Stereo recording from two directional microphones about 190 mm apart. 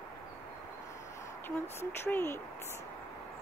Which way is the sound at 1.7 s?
10° left (ahead or behind).